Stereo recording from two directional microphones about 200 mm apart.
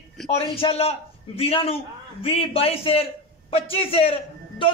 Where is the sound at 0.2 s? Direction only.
Centre (ahead or behind).